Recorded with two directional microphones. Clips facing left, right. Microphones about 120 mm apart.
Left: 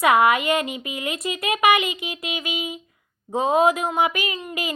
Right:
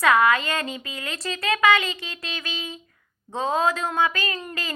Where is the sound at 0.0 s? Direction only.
20° left (ahead or behind).